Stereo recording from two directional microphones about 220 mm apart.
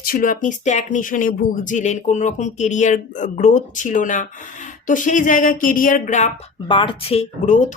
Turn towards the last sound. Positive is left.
turn(degrees=30)  # may be behind; listen again after turning